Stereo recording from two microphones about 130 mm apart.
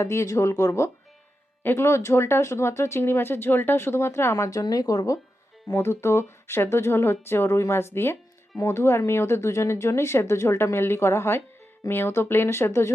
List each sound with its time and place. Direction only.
0.0 s speech: 20° left (ahead or behind)